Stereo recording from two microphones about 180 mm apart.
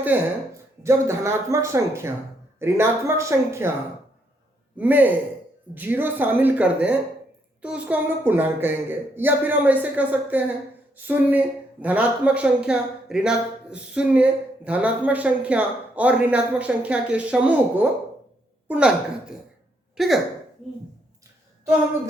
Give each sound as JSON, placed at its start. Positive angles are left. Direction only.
{"t": 0.1, "sound": "speech", "side_deg": -10}
{"t": 4.8, "sound": "speech", "side_deg": -10}